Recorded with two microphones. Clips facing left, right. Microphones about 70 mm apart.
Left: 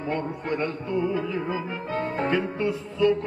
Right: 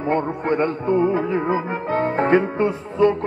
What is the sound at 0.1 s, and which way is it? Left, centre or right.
Music, right.